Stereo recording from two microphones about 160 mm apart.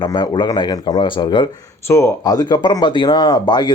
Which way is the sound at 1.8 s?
15° left (ahead or behind).